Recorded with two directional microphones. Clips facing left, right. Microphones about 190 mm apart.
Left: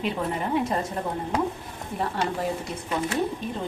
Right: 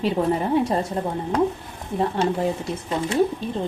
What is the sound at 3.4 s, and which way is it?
Speech, 30° right (ahead or behind).